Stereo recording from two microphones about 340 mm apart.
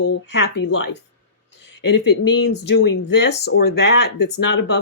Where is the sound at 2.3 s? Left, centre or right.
Left.